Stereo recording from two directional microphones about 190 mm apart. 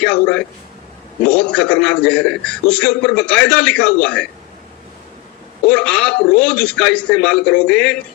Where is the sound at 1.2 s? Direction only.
5° left (ahead or behind).